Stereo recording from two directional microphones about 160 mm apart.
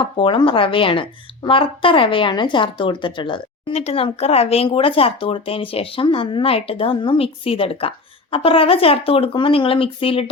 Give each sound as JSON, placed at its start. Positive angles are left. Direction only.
{"t": 0.0, "sound": "a woman's voice", "side_deg": 30}